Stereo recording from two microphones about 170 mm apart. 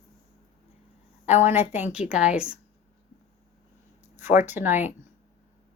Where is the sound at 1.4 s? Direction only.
10° right (ahead or behind).